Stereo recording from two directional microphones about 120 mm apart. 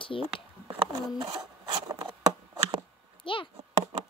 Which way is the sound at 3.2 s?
45° left (ahead or behind).